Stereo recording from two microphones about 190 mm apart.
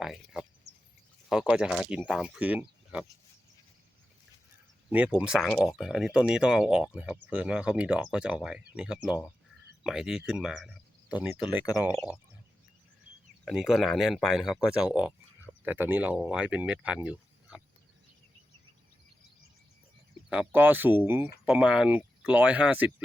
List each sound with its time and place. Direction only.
0.0 s speech: centre (ahead or behind)
0.7 s a sound: 60° right (ahead or behind)
1.3 s speech: 5° right (ahead or behind)
4.9 s speech: 5° right (ahead or behind)
13.4 s speech: centre (ahead or behind)
20.3 s speech: 10° right (ahead or behind)